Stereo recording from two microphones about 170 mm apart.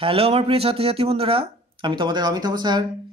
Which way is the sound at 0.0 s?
35° right (ahead or behind).